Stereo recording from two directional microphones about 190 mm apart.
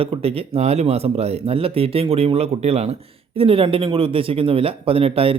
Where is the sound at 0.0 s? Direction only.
30° right (ahead or behind).